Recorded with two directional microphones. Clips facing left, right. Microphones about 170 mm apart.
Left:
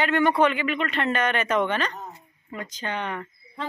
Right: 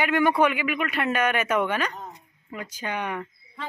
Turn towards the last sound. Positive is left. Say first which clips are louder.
# even
turn(degrees=-10)  # may be behind; listen again after turning